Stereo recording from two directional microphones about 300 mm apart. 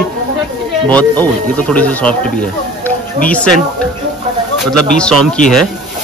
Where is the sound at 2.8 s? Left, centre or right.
Centre.